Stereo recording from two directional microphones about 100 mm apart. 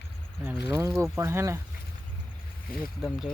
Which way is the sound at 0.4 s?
30° right (ahead or behind).